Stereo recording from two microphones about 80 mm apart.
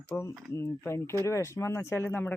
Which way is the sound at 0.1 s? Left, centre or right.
Left.